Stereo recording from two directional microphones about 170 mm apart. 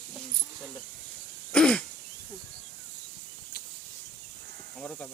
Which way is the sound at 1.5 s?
5° left (ahead or behind).